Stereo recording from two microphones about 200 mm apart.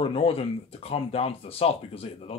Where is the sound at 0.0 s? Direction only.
30° left (ahead or behind).